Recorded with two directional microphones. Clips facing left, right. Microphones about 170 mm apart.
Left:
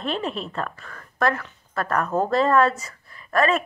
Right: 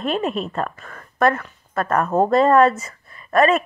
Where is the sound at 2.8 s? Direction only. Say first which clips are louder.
Right 3 dB; 20° right (ahead or behind).